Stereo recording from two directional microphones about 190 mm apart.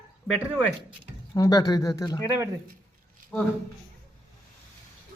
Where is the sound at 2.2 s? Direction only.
15° right (ahead or behind).